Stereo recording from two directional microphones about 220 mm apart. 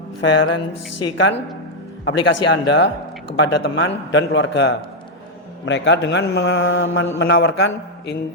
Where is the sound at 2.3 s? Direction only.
55° left (ahead or behind).